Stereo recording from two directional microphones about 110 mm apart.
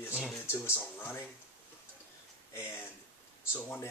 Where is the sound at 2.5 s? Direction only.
25° left (ahead or behind).